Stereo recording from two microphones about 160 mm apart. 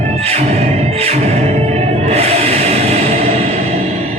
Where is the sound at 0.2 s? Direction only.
40° right (ahead or behind).